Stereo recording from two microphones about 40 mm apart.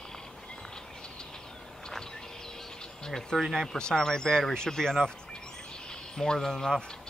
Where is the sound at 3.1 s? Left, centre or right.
Centre.